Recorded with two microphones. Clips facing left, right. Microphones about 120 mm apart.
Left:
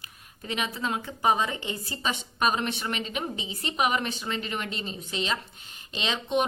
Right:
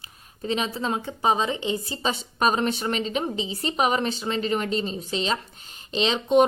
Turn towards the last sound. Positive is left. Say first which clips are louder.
# right 7 dB
turn(degrees=-30)  # may be behind; listen again after turning